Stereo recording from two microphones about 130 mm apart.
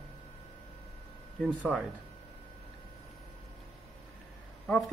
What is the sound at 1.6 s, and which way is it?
Speech, 10° right (ahead or behind).